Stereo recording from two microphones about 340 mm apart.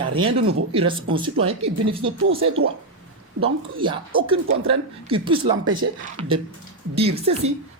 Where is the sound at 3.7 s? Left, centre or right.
Centre.